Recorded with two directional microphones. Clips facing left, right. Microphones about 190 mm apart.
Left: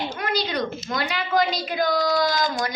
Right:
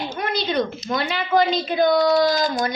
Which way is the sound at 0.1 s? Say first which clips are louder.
Right 2 dB; 25° right (ahead or behind).